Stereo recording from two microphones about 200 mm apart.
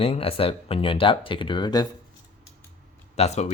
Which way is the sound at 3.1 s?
35° left (ahead or behind).